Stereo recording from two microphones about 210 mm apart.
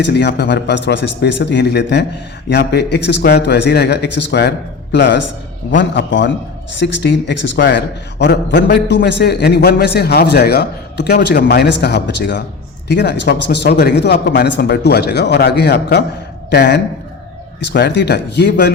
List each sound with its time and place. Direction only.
0.0 s a man's voice: 55° left (ahead or behind)